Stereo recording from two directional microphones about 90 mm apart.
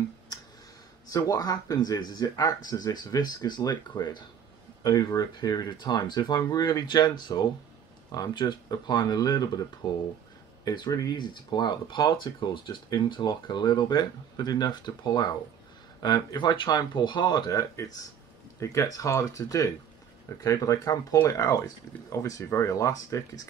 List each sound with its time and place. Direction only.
1.1 s speech: 45° left (ahead or behind)